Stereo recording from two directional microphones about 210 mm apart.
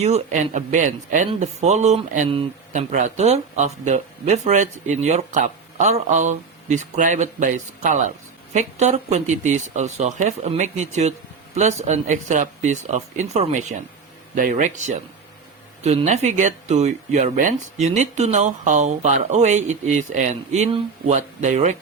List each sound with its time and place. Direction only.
0.0 s speech: 35° right (ahead or behind)